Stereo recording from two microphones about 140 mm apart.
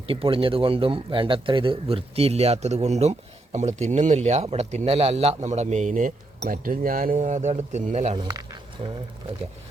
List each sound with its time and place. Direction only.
0.1 s a man's voice: 40° right (ahead or behind); by 8.1 s 55° right (ahead or behind)
8.1 s speech: 30° right (ahead or behind)